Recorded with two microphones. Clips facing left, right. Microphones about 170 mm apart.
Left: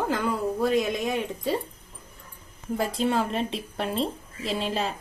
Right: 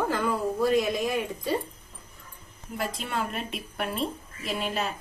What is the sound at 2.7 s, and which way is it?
A woman's voice, 30° left (ahead or behind).